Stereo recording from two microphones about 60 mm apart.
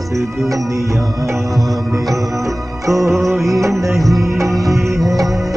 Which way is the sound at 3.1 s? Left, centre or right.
Centre.